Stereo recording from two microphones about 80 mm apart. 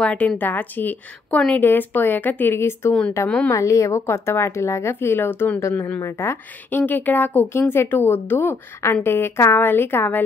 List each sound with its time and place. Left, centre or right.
0.0 s a woman's voice: centre
5.6 s a woman's voice: left